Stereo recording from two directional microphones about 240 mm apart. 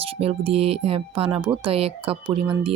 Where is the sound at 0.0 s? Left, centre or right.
Right.